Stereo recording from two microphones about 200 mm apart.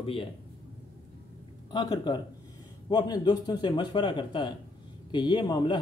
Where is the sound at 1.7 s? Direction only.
20° left (ahead or behind).